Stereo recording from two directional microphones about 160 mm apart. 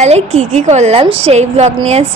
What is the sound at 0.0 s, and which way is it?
A woman's voice, 45° right (ahead or behind).